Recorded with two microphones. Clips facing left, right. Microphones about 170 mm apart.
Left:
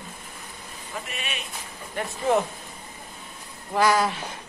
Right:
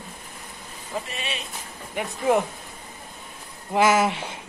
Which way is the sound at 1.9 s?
10° right (ahead or behind).